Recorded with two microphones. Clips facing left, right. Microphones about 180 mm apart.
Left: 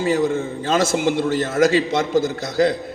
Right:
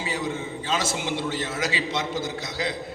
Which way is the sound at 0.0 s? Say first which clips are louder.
Left 10 dB; 50° left (ahead or behind).